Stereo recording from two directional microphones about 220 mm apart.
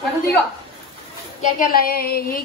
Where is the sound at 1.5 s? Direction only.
40° left (ahead or behind).